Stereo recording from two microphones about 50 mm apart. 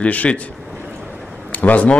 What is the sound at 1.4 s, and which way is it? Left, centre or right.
Speech, left.